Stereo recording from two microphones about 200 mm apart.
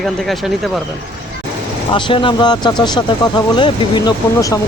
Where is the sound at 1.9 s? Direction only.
25° left (ahead or behind).